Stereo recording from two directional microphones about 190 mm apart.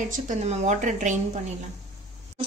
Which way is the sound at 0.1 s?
40° right (ahead or behind).